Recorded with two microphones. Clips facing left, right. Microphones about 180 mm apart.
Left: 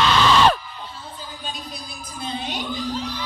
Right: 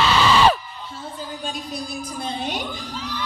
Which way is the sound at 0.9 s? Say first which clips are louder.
Right 5 dB; 45° right (ahead or behind).